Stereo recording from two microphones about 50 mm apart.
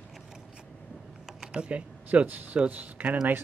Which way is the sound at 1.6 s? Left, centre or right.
Right.